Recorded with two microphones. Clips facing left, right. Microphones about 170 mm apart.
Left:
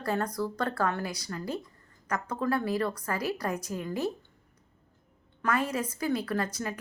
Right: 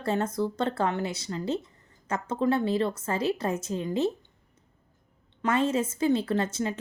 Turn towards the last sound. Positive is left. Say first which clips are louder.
# right 4 dB
turn(degrees=-25)  # may be behind; listen again after turning